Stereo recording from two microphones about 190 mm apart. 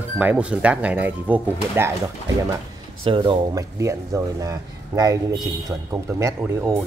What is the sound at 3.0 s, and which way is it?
Speech, 25° right (ahead or behind).